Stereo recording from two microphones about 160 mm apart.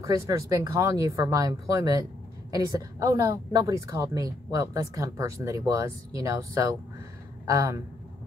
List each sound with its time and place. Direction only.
0.0 s a woman's voice: 20° right (ahead or behind)